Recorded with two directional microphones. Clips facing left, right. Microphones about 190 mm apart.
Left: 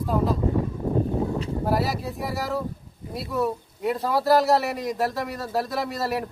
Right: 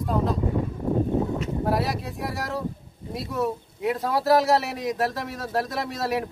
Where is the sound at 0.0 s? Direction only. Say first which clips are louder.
Left 1 dB; centre (ahead or behind).